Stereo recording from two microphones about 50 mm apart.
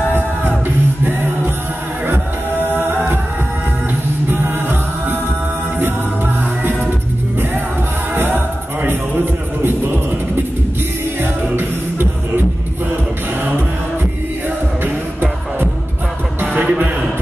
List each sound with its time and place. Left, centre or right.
2.7 s music: right
4.3 s music: right
8.1 s music: right
14.8 s music: right
16.6 s music: right